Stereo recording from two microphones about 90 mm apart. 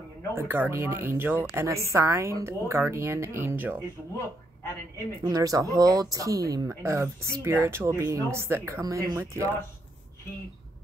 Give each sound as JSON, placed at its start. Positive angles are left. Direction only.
{"t": 0.3, "sound": "a woman's voice", "side_deg": -25}
{"t": 5.2, "sound": "speech", "side_deg": -40}
{"t": 6.7, "sound": "a woman's voice", "side_deg": -30}
{"t": 8.8, "sound": "speech", "side_deg": -40}